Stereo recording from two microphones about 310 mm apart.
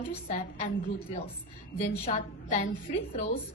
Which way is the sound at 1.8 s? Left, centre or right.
Left.